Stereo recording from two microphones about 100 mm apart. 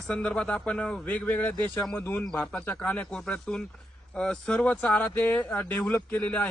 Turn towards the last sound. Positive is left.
turn(degrees=15)  # may be behind; listen again after turning